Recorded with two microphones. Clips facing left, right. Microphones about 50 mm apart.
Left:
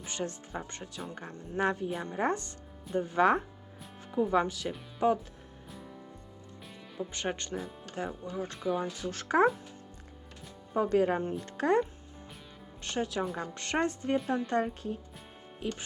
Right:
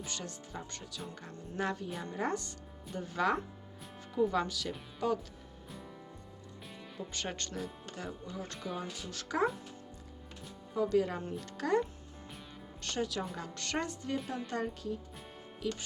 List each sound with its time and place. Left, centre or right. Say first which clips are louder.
0.0 s a woman's voice: left 6 dB; left
4.1 s speech: left 3 dB; centre
7.1 s speech: left 5 dB; centre
7.9 s speech: left 8 dB; left
8.5 s speech: left 9 dB; centre
9.0 s a woman's voice: left 6 dB; left
10.8 s a woman's voice: left 4 dB; left